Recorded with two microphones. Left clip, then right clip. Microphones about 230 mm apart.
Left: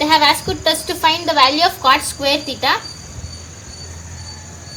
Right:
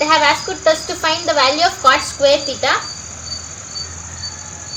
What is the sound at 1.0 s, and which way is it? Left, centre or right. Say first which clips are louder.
A woman's voice: left 2 dB; left.